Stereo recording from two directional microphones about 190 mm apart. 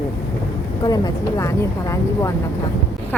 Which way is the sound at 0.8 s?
20° left (ahead or behind).